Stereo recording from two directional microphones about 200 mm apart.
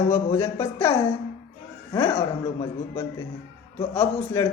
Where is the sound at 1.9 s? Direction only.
25° left (ahead or behind).